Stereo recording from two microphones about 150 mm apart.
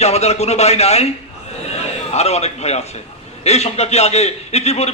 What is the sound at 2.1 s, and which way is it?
A man's voice, 45° left (ahead or behind).